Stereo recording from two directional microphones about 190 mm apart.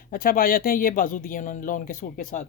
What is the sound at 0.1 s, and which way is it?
Speech, 50° left (ahead or behind).